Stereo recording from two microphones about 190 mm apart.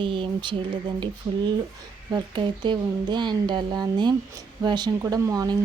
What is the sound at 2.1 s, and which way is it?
Speech, 25° right (ahead or behind).